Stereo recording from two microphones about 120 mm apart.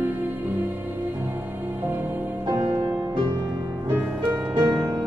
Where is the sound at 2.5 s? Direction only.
20° right (ahead or behind).